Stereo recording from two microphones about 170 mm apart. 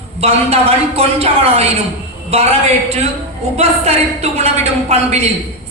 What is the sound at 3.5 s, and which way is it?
Speech, 40° right (ahead or behind).